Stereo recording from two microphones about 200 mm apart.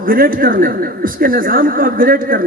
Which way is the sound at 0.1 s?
45° right (ahead or behind).